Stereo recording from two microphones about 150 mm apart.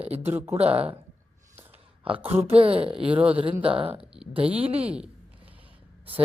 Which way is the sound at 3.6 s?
35° right (ahead or behind).